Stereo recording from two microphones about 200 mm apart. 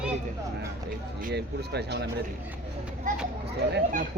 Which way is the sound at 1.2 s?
55° right (ahead or behind).